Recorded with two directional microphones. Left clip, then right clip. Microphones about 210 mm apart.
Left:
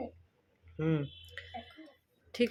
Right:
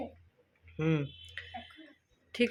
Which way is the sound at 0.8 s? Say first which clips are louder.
Right 1 dB; 5° right (ahead or behind).